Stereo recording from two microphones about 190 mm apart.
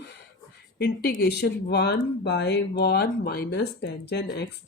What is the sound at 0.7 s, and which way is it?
Speech, 60° left (ahead or behind).